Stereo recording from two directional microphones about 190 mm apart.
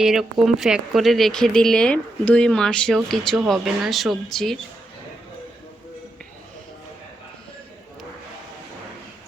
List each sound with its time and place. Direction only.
0.0 s speech: centre (ahead or behind)